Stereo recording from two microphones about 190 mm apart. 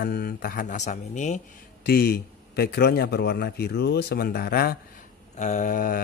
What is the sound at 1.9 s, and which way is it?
A man's voice, 55° left (ahead or behind).